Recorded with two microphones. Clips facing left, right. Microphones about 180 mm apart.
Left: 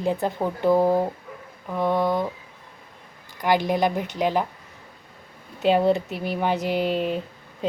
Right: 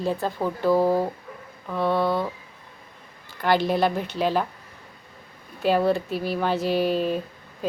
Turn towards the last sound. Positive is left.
turn(degrees=25)  # may be behind; listen again after turning